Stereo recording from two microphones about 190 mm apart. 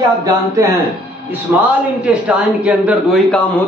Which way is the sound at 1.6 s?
5° right (ahead or behind).